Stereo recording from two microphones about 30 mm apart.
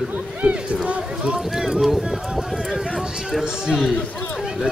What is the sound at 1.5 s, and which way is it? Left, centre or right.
Clip-clop, centre.